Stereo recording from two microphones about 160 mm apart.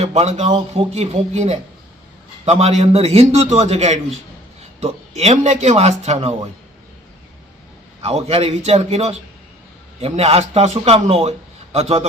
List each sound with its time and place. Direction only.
0.0 s a man's voice: 40° right (ahead or behind)
8.0 s a man's voice: 40° right (ahead or behind)